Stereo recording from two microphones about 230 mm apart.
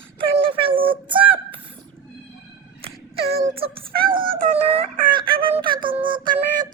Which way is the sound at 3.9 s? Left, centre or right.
Right.